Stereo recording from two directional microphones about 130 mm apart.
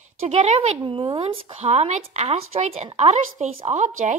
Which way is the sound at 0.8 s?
40° right (ahead or behind).